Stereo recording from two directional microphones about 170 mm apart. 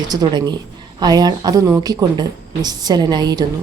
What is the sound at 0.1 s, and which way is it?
Speech, 25° right (ahead or behind).